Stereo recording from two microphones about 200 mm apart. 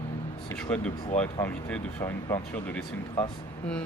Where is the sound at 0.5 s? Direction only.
5° left (ahead or behind).